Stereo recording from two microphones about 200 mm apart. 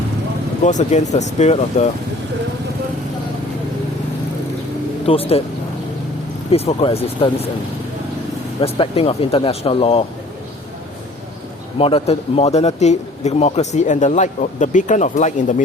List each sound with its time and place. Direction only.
0.6 s a man's voice: 35° left (ahead or behind)
5.0 s speech: 30° left (ahead or behind)
6.5 s speech: 30° left (ahead or behind)
8.6 s speech: 30° left (ahead or behind)
11.8 s a man's voice: 30° left (ahead or behind)